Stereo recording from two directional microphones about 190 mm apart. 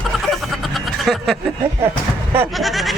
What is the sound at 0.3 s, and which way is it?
Snicker, centre (ahead or behind).